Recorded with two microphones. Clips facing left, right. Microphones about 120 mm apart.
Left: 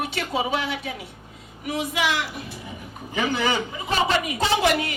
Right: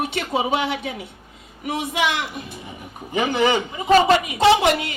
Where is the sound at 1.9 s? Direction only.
25° right (ahead or behind).